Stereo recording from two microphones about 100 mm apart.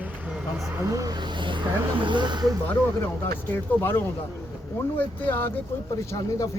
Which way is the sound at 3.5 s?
20° left (ahead or behind).